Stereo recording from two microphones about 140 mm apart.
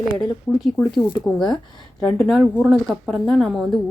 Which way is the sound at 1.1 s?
30° left (ahead or behind).